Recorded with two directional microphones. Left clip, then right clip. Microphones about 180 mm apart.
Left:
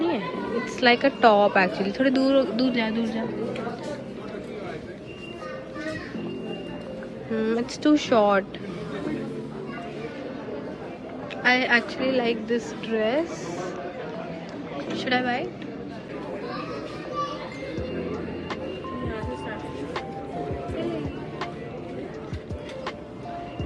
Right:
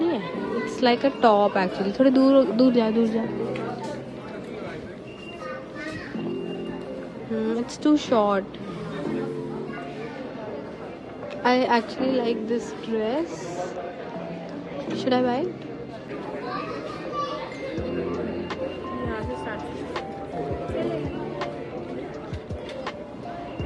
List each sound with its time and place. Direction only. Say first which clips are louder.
0.6 s a sound: left 2 dB; 20° right (ahead or behind)
1.0 s speech: even; 15° right (ahead or behind)
7.3 s speech: left 1 dB; 15° right (ahead or behind)
11.4 s speech: even; 25° right (ahead or behind)
14.9 s a woman's voice: right 2 dB; 25° right (ahead or behind)